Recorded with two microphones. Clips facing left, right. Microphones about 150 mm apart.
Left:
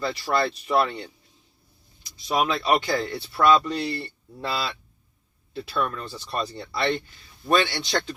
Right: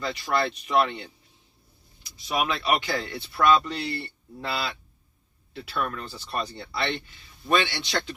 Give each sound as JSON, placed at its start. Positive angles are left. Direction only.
{"t": 0.0, "sound": "speech", "side_deg": 35}
{"t": 2.2, "sound": "speech", "side_deg": 35}